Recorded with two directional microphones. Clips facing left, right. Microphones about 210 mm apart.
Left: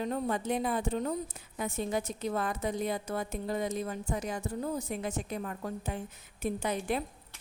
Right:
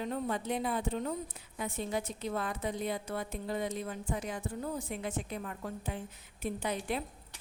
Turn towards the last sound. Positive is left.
turn(degrees=45)  # may be behind; listen again after turning